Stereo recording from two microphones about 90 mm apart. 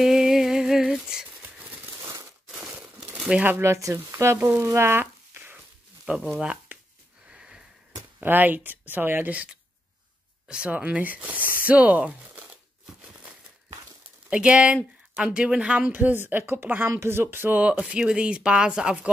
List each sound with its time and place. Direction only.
0.0 s a sound: 5° right (ahead or behind)
2.0 s crumpling: 35° right (ahead or behind)
2.6 s crumpling: 10° right (ahead or behind)
3.4 s speech: 25° right (ahead or behind)
4.6 s a sound: 30° right (ahead or behind)
6.0 s speech: 10° right (ahead or behind)
6.4 s a sound: 10° right (ahead or behind)
7.2 s sniff: 10° right (ahead or behind)
8.2 s speech: 20° right (ahead or behind)
14.3 s speech: 15° right (ahead or behind)
17.7 s speech: 5° right (ahead or behind)